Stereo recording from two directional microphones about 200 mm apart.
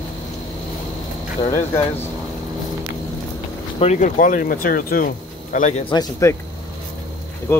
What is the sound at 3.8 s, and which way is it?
Speech, 35° left (ahead or behind).